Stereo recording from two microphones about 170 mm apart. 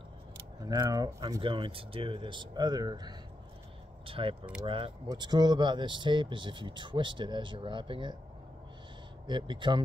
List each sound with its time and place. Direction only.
0.6 s speech: 20° right (ahead or behind)
9.3 s speech: 30° right (ahead or behind)